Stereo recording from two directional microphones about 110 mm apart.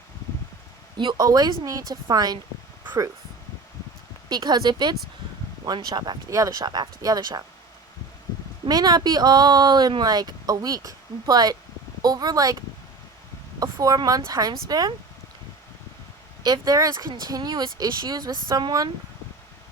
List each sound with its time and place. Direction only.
0.9 s speech: 40° right (ahead or behind)
4.3 s speech: 40° right (ahead or behind)
8.6 s speech: 40° right (ahead or behind)
16.4 s speech: 35° right (ahead or behind)